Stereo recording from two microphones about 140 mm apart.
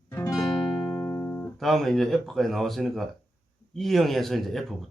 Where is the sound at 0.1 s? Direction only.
20° left (ahead or behind).